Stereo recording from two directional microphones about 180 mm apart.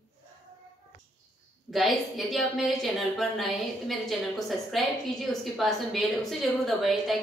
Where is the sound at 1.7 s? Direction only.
Centre (ahead or behind).